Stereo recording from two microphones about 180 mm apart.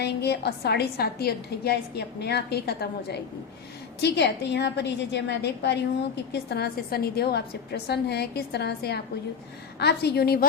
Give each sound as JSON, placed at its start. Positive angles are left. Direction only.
{"t": 0.0, "sound": "a woman's voice", "side_deg": 65}